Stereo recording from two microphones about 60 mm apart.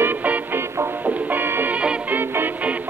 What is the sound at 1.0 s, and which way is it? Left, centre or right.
Music, right.